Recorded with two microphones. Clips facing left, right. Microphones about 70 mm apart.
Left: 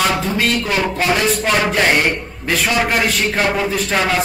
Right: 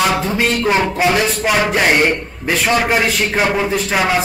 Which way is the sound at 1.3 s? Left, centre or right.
Centre.